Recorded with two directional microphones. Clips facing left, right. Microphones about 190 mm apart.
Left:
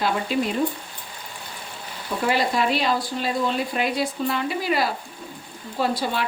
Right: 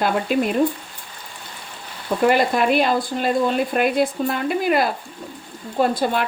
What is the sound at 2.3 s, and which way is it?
Speech, 55° right (ahead or behind).